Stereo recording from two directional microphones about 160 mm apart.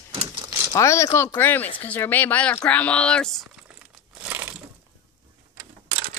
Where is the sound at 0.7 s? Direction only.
20° left (ahead or behind).